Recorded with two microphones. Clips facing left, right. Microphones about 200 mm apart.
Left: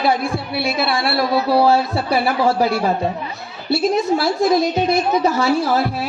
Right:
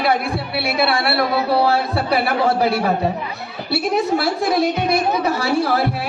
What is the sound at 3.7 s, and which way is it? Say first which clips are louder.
A woman's voice: left 2 dB; 60° right (ahead or behind).